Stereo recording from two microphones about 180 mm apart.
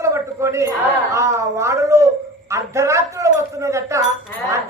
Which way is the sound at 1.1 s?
15° right (ahead or behind).